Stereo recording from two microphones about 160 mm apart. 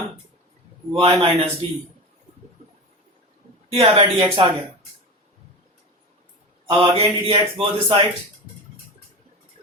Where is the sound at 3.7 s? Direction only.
35° right (ahead or behind).